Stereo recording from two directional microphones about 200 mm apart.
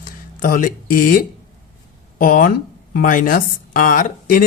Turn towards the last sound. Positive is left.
turn(degrees=45)  # may be behind; listen again after turning